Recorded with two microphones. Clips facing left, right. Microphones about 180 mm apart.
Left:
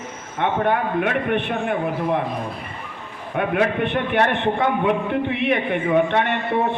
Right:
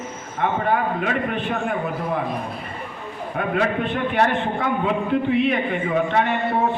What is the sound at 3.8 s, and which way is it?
A man's voice, 65° left (ahead or behind).